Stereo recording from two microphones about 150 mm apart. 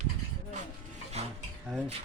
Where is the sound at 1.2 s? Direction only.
45° right (ahead or behind).